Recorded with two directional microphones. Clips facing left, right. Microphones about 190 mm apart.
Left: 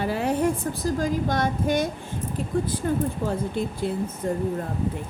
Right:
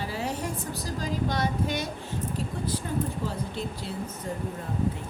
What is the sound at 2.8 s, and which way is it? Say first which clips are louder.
Speech: left 6 dB; 55° left (ahead or behind).